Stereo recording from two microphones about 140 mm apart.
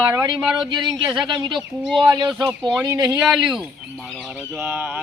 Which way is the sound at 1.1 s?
35° right (ahead or behind).